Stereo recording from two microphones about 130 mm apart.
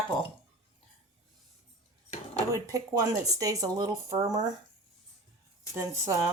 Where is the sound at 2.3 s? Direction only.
25° right (ahead or behind).